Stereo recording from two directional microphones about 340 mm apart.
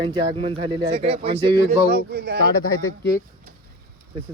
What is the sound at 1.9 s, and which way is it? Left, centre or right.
Speech, right.